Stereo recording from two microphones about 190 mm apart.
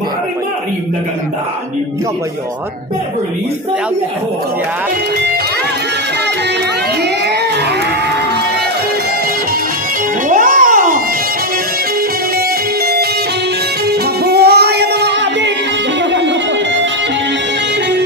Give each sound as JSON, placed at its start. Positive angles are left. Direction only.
{"t": 10.2, "sound": "music", "side_deg": -45}
{"t": 13.8, "sound": "music", "side_deg": -55}